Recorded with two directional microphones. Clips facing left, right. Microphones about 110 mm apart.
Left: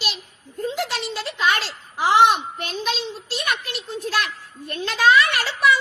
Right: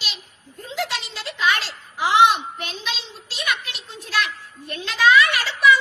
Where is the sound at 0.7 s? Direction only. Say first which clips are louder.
Right 2 dB; 45° left (ahead or behind).